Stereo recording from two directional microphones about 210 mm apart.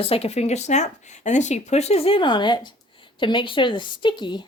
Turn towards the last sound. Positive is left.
turn(degrees=20)  # may be behind; listen again after turning